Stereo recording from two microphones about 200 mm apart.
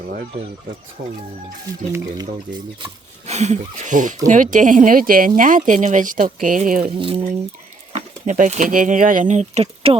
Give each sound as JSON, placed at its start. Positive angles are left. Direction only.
{"t": 2.1, "sound": "speech", "side_deg": -20}
{"t": 6.9, "sound": "speech", "side_deg": -25}
{"t": 7.9, "sound": "speech", "side_deg": -35}